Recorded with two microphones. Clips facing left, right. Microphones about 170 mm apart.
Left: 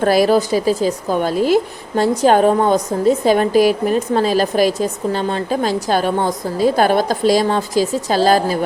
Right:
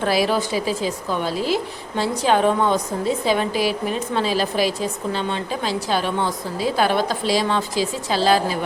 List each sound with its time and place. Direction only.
0.0 s a woman's voice: 45° left (ahead or behind)